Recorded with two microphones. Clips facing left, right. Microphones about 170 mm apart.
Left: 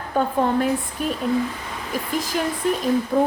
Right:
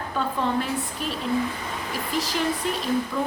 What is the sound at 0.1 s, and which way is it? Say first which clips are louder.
A woman's voice: left 6 dB; 50° left (ahead or behind).